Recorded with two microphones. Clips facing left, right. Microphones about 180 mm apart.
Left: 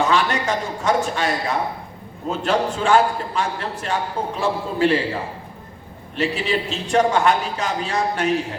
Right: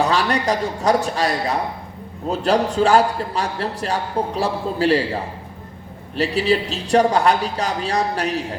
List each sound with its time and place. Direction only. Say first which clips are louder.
0.0 s a man's voice: right 1 dB; 35° right (ahead or behind)
6.1 s a man's voice: right 3 dB; 35° right (ahead or behind)